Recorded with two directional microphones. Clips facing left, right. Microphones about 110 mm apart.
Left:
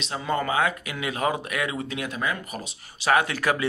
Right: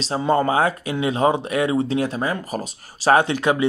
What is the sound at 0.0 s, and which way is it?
Speech, 35° right (ahead or behind).